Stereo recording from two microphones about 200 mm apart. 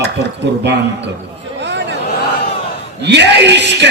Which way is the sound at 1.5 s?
60° right (ahead or behind).